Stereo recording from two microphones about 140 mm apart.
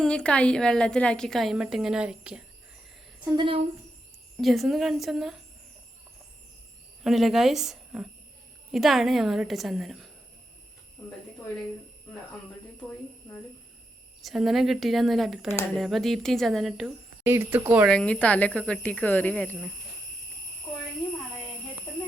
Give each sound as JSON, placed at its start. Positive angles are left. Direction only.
{"t": 0.0, "sound": "a woman's voice", "side_deg": 5}
{"t": 3.3, "sound": "a woman's voice", "side_deg": -40}
{"t": 4.4, "sound": "a woman's voice", "side_deg": 0}
{"t": 7.0, "sound": "a woman's voice", "side_deg": 0}
{"t": 14.2, "sound": "a woman's voice", "side_deg": 0}
{"t": 17.2, "sound": "speech", "side_deg": -15}
{"t": 17.8, "sound": "speech", "side_deg": 10}